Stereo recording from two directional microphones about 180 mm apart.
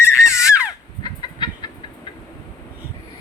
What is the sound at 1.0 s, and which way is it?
Fowl, 25° left (ahead or behind).